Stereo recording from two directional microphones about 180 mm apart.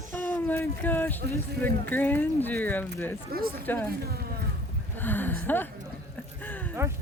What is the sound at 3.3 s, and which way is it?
Speech, 55° right (ahead or behind).